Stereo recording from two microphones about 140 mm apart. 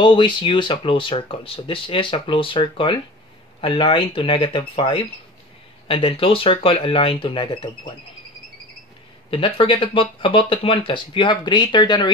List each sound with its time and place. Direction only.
0.0 s speech: 35° left (ahead or behind)
9.3 s speech: 40° left (ahead or behind)